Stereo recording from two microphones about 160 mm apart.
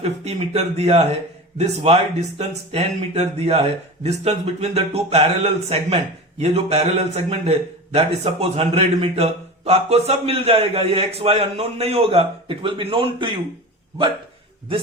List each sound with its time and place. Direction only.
0.0 s a man's voice: 40° right (ahead or behind)